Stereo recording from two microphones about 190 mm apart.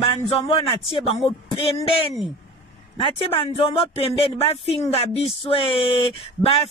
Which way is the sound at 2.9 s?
25° left (ahead or behind).